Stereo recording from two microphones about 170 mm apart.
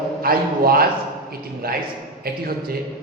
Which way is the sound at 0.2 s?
60° right (ahead or behind).